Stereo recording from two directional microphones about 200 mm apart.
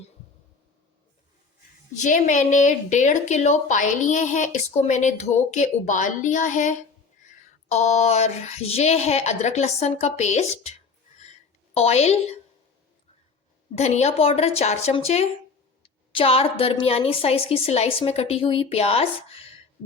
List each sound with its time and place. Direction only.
2.0 s a woman's voice: 40° left (ahead or behind)
13.7 s a woman's voice: 35° left (ahead or behind)